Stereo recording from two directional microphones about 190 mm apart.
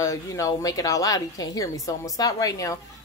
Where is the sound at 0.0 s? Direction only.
15° left (ahead or behind).